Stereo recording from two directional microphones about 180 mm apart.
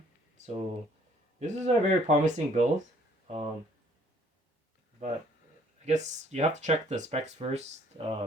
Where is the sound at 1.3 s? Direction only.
40° right (ahead or behind).